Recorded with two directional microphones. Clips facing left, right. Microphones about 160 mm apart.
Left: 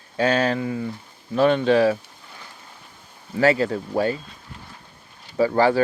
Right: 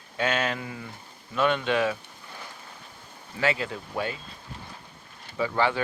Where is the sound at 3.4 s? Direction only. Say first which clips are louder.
Left 9 dB; 40° left (ahead or behind).